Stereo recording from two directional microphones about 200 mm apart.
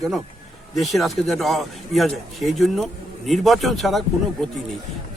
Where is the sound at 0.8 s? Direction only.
Centre (ahead or behind).